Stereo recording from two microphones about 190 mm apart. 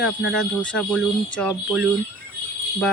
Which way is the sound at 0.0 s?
Centre (ahead or behind).